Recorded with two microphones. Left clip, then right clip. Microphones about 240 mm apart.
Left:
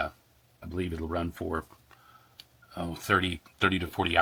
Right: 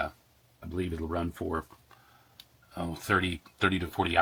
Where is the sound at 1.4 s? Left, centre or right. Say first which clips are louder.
Even; left.